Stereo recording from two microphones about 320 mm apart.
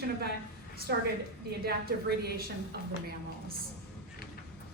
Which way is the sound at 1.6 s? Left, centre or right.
Right.